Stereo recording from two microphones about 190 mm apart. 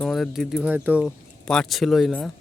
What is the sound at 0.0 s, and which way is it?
Speech, centre (ahead or behind).